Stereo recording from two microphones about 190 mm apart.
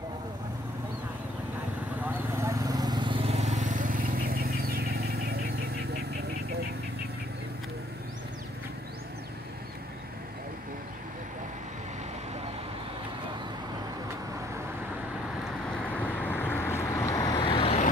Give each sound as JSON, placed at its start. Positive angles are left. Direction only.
{"t": 2.0, "sound": "vehicle", "side_deg": -15}
{"t": 15.9, "sound": "vehicle", "side_deg": 10}